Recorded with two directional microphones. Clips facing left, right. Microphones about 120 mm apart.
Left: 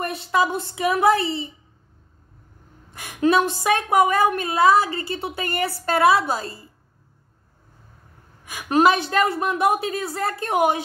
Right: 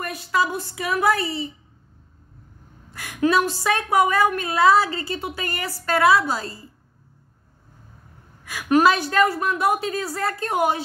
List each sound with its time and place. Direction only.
0.0 s a woman's voice: 25° left (ahead or behind)
2.9 s a woman's voice: 25° left (ahead or behind)
8.5 s a woman's voice: 25° left (ahead or behind)